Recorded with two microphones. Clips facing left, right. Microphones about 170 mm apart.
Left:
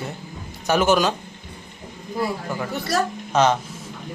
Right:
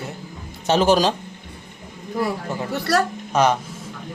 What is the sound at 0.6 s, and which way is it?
Speech, 30° right (ahead or behind).